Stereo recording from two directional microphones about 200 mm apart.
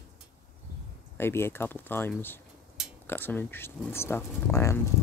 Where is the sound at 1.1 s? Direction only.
10° left (ahead or behind).